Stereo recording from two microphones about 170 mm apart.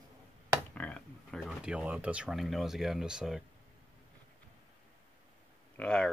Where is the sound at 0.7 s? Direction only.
5° left (ahead or behind).